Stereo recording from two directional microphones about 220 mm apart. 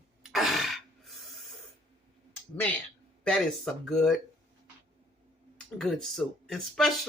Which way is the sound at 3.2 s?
5° left (ahead or behind).